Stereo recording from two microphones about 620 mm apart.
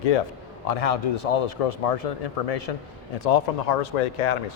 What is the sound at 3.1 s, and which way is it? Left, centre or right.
Speech, left.